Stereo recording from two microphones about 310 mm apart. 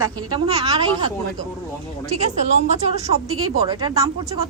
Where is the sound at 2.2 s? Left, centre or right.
Right.